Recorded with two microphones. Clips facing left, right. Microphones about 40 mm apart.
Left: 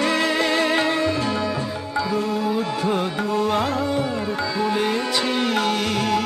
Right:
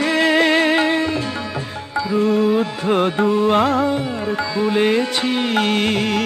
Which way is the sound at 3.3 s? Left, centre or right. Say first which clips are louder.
Right 3 dB; right.